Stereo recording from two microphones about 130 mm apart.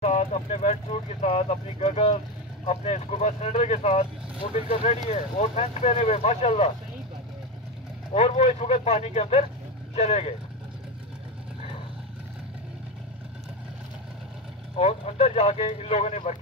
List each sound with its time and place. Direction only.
0.0 s speech: 60° left (ahead or behind)
5.1 s speech: 65° left (ahead or behind)
8.1 s speech: 55° left (ahead or behind)
14.8 s speech: 55° left (ahead or behind)